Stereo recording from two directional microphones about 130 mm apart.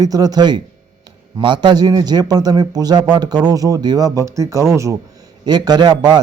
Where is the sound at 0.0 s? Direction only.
30° right (ahead or behind).